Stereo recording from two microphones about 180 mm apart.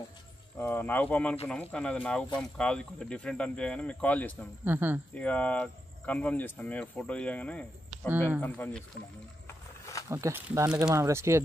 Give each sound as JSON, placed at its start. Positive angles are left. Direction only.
{"t": 0.6, "sound": "speech", "side_deg": 10}
{"t": 4.6, "sound": "speech", "side_deg": -10}
{"t": 5.1, "sound": "speech", "side_deg": 5}
{"t": 9.5, "sound": "wild animals", "side_deg": 15}
{"t": 10.0, "sound": "speech", "side_deg": -15}